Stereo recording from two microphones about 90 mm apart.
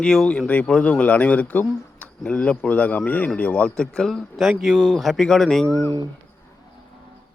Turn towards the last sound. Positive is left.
turn(degrees=-45)  # may be behind; listen again after turning